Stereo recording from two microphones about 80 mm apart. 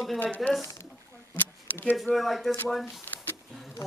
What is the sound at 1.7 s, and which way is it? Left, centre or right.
Speech, left.